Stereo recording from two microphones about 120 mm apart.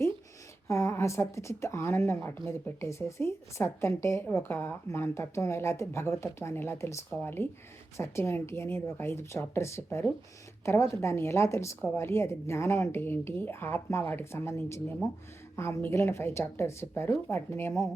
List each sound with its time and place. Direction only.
0.7 s a woman's voice: 25° left (ahead or behind)